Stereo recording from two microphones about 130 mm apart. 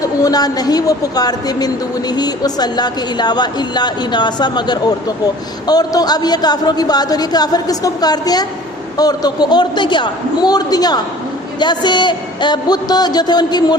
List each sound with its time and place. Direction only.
0.0 s a woman's voice: 30° left (ahead or behind)